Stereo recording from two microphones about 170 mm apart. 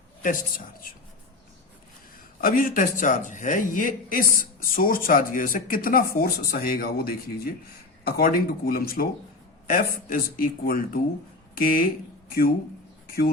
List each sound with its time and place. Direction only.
0.2 s a woman's voice: 55° left (ahead or behind)
2.4 s a man's voice: 55° left (ahead or behind)